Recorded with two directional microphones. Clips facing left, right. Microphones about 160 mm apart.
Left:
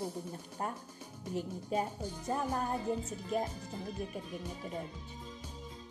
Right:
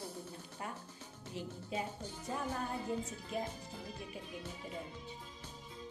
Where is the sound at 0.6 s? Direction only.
45° left (ahead or behind).